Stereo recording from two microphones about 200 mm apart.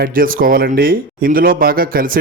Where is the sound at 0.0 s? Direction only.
45° right (ahead or behind).